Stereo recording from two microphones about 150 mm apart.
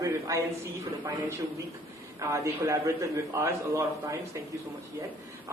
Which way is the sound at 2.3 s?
20° right (ahead or behind).